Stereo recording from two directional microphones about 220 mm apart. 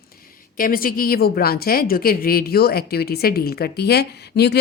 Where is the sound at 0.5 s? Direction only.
40° left (ahead or behind).